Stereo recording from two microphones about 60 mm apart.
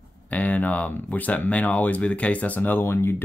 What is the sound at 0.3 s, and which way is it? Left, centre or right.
Speech, left.